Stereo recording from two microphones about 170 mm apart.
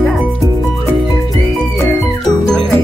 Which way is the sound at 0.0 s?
Centre (ahead or behind).